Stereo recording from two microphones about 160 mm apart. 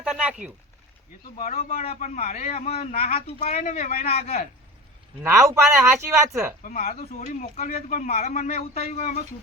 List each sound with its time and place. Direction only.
0.1 s a sound: 5° right (ahead or behind)
1.4 s speech: 45° left (ahead or behind); by 4.1 s 60° left (ahead or behind)
5.2 s speech: 20° right (ahead or behind)
6.7 s speech: 60° left (ahead or behind)
8.9 s speech: 45° left (ahead or behind)